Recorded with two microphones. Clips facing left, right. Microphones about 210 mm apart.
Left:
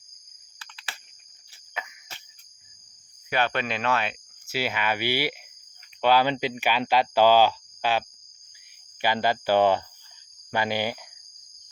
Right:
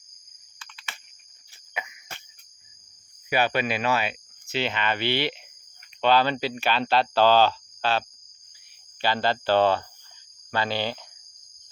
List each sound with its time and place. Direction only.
1.8 s cricket: 10° right (ahead or behind)
3.2 s speech: 10° right (ahead or behind)
4.4 s speech: 10° left (ahead or behind)